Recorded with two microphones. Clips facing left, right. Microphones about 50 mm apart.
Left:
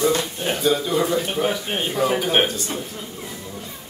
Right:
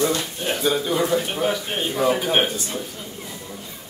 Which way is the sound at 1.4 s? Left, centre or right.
Centre.